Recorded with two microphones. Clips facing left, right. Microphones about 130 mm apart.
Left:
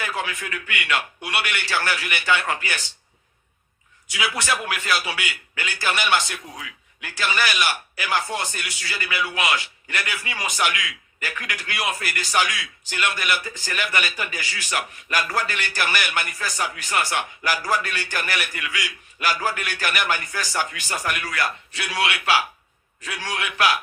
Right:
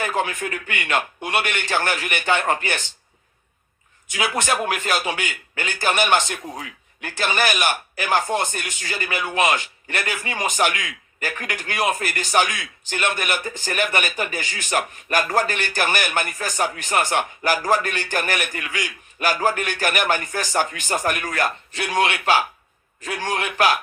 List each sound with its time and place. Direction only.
0.0 s a man's voice: 45° right (ahead or behind)
4.1 s a man's voice: 45° right (ahead or behind)